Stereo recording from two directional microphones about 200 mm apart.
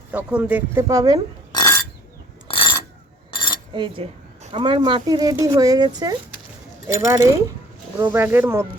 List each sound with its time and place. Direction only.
0.1 s speech: 5° right (ahead or behind)
1.5 s burping: 15° left (ahead or behind)
2.5 s a sound: 25° left (ahead or behind)
3.7 s speech: 25° right (ahead or behind)